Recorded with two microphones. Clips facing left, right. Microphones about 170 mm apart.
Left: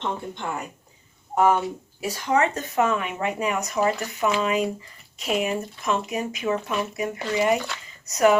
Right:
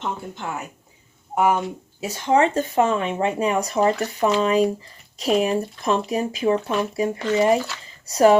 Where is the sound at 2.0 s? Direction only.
25° right (ahead or behind).